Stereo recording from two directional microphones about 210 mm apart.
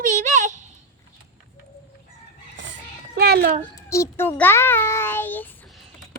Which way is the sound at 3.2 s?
50° right (ahead or behind).